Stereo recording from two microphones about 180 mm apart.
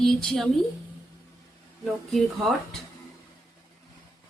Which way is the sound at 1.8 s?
Centre (ahead or behind).